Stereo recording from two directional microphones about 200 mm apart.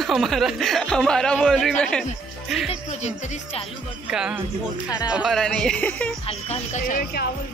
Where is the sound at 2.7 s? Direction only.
30° left (ahead or behind).